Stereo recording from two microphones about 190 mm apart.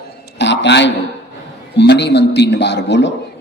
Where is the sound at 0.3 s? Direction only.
65° left (ahead or behind).